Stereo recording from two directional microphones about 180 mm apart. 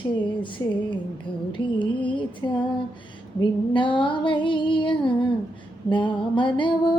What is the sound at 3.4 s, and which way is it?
Female singing, 25° left (ahead or behind).